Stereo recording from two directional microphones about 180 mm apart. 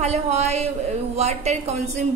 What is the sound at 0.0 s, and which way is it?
A woman's voice, 40° right (ahead or behind).